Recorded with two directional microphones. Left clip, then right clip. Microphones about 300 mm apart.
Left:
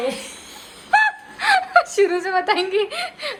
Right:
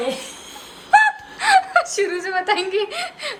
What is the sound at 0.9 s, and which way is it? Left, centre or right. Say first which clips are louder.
Speech: right 3 dB; centre.